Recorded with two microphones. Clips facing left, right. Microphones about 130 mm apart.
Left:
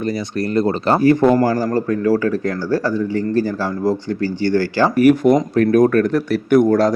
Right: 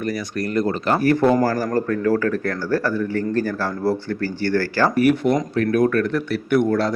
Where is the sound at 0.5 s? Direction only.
30° left (ahead or behind).